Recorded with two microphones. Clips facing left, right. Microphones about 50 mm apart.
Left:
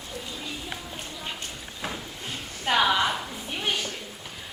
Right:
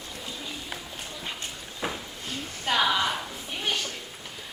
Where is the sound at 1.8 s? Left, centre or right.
Centre.